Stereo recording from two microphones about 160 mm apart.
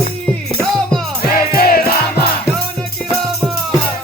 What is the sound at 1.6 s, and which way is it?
Music, 70° left (ahead or behind).